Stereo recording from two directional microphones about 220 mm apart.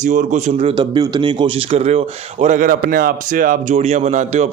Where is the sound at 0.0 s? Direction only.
35° right (ahead or behind).